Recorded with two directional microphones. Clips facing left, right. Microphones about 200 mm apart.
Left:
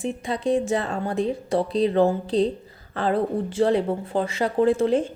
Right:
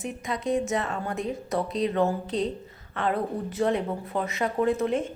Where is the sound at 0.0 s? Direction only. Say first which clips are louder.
Left 5 dB; 30° left (ahead or behind).